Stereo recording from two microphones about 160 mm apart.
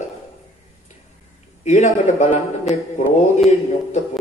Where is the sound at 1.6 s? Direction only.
45° left (ahead or behind).